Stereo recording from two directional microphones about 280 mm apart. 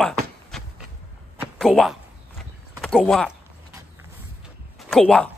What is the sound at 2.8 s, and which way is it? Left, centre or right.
Speech, centre.